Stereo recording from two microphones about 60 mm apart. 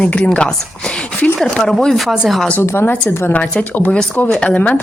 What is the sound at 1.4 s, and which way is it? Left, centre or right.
Speech, centre.